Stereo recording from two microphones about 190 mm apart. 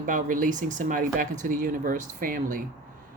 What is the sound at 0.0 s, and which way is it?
A woman's voice, 45° right (ahead or behind).